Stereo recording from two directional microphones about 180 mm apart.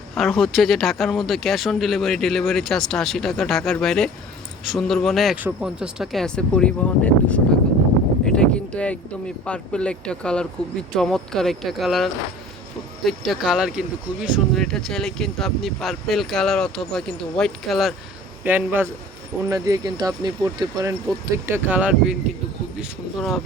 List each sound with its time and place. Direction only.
0.2 s speech: centre (ahead or behind)
8.2 s a sound: 5° left (ahead or behind)
9.4 s speech: 5° left (ahead or behind)